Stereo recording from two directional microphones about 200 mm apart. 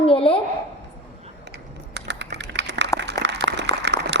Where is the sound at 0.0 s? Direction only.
25° left (ahead or behind).